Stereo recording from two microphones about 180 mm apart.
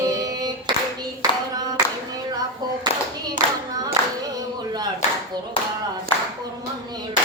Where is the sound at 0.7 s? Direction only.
25° right (ahead or behind).